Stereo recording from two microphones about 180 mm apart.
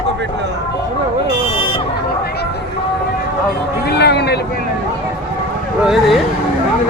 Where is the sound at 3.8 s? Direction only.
65° left (ahead or behind).